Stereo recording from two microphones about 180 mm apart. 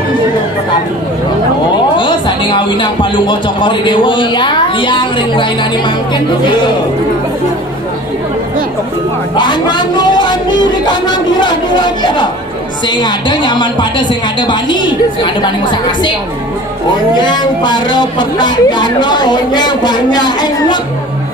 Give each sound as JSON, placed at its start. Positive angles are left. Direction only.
{"t": 2.0, "sound": "speech", "side_deg": 25}
{"t": 9.4, "sound": "speech", "side_deg": 25}
{"t": 17.2, "sound": "speech", "side_deg": 25}